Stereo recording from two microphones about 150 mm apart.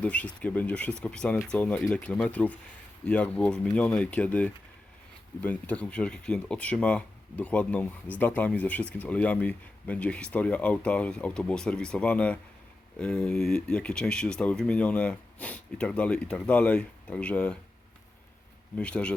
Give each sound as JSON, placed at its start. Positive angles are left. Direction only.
{"t": 0.0, "sound": "speech", "side_deg": 10}
{"t": 18.8, "sound": "speech", "side_deg": 5}